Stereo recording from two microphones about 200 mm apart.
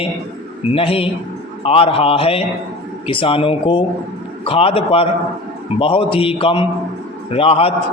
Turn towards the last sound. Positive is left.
turn(degrees=30)  # may be behind; listen again after turning